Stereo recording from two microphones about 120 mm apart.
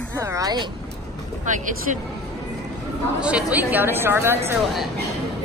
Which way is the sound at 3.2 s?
10° right (ahead or behind).